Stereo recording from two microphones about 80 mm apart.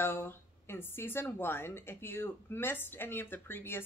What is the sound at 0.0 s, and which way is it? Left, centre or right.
Speech, left.